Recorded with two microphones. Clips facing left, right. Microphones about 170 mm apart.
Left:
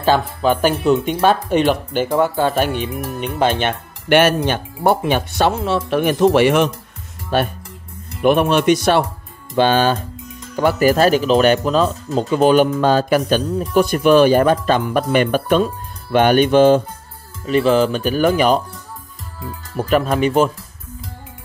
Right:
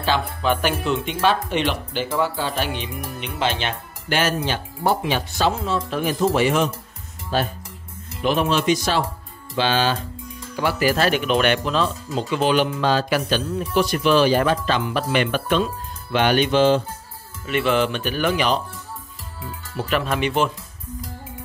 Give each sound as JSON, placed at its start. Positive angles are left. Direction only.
{"t": 0.4, "sound": "speech", "side_deg": 40}
{"t": 9.6, "sound": "speech", "side_deg": 50}
{"t": 17.5, "sound": "speech", "side_deg": 35}
{"t": 19.8, "sound": "speech", "side_deg": 40}